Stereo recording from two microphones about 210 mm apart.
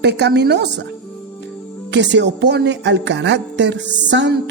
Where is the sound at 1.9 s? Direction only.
55° right (ahead or behind).